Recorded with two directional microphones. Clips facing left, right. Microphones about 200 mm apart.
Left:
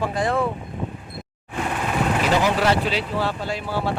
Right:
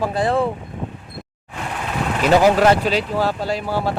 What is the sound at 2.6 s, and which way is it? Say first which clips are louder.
Speech: right 5 dB; 40° right (ahead or behind).